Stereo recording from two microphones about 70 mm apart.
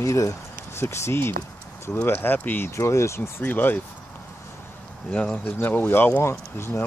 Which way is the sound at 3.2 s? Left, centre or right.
Left.